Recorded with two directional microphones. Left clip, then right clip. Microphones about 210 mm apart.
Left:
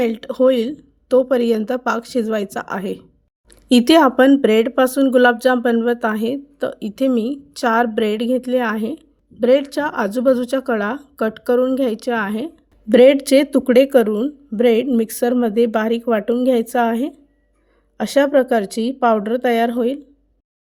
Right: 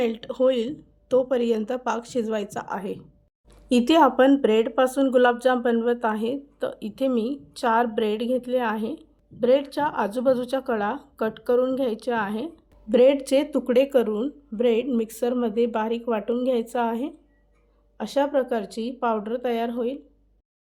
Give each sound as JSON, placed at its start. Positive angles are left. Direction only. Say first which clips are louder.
{"t": 0.0, "sound": "speech", "louder": "left 6 dB", "side_deg": 40}